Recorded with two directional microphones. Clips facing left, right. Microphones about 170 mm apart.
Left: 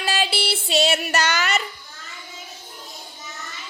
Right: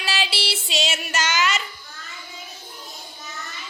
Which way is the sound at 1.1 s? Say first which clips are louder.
Left 1 dB; 60° left (ahead or behind).